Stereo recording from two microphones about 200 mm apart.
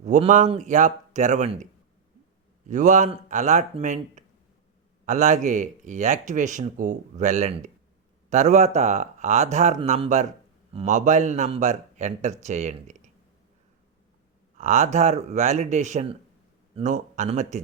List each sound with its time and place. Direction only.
0.0 s speech: 35° right (ahead or behind)
2.6 s speech: 40° right (ahead or behind)
14.6 s speech: 35° right (ahead or behind)